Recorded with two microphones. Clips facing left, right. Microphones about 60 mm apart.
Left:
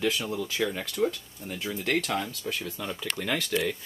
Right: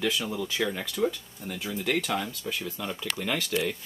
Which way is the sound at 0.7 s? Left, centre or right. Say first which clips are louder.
Even; centre.